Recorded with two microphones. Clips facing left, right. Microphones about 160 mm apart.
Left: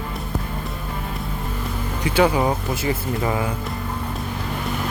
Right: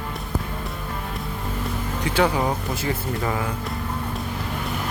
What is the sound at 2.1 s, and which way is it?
Speech, 10° left (ahead or behind).